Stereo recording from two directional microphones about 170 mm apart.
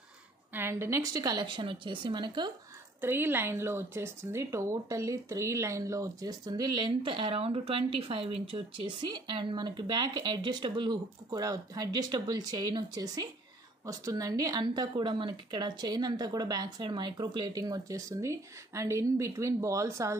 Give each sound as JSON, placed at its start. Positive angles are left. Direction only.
{"t": 0.5, "sound": "a woman's voice", "side_deg": -15}
{"t": 3.0, "sound": "a woman's voice", "side_deg": -10}